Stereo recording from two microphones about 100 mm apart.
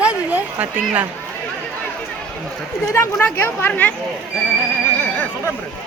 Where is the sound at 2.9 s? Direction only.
25° left (ahead or behind).